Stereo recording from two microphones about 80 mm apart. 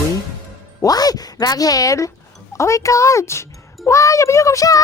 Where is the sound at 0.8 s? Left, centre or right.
Left.